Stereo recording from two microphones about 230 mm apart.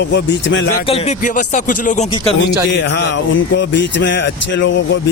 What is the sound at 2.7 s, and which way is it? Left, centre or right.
Speech, left.